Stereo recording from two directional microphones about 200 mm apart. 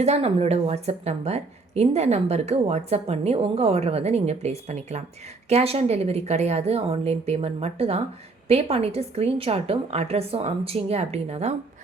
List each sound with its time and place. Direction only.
0.0 s a woman's voice: 30° right (ahead or behind)